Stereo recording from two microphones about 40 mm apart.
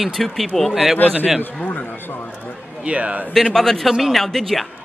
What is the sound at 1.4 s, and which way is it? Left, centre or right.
Speech, left.